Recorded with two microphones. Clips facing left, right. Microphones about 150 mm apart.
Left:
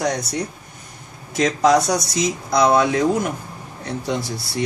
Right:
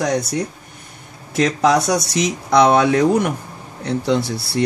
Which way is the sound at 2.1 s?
70° right (ahead or behind).